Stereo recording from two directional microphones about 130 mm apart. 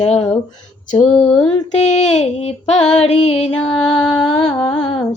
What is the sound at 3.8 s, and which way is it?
Music, 5° left (ahead or behind).